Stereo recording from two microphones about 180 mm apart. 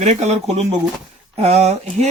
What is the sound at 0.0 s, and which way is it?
Speech, 40° right (ahead or behind).